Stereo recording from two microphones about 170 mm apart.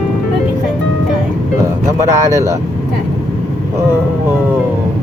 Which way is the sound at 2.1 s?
20° right (ahead or behind).